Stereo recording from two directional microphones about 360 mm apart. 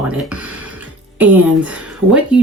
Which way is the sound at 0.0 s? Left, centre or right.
Centre.